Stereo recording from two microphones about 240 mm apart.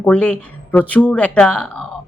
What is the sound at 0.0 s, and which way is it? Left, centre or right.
A woman's voice, centre.